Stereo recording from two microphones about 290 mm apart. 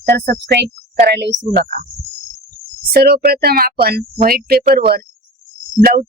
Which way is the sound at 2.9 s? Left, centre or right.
Right.